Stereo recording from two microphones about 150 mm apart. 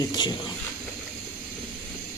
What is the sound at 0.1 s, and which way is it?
Speech, 25° left (ahead or behind).